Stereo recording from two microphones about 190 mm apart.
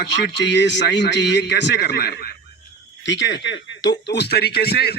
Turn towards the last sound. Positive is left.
turn(degrees=55)  # may be behind; listen again after turning